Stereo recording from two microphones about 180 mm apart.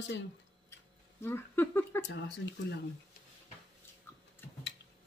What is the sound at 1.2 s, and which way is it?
Speech, 15° left (ahead or behind).